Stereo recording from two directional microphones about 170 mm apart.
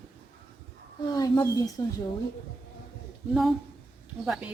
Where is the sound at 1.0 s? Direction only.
20° left (ahead or behind).